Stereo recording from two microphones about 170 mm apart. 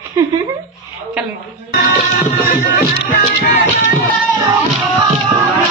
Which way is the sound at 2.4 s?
55° left (ahead or behind).